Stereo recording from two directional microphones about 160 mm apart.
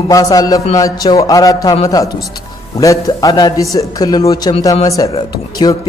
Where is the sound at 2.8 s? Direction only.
20° left (ahead or behind).